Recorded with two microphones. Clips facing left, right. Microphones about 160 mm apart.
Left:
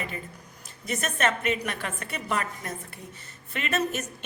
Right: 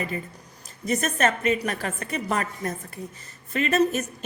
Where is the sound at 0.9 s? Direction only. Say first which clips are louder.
Right 4 dB; 40° right (ahead or behind).